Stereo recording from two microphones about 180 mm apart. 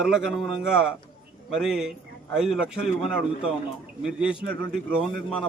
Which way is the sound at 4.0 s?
5° right (ahead or behind).